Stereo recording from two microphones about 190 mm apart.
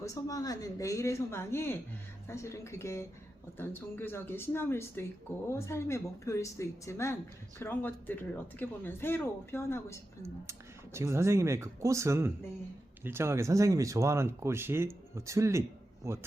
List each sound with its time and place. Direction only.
0.0 s speech: 15° left (ahead or behind)
10.9 s speech: 15° right (ahead or behind)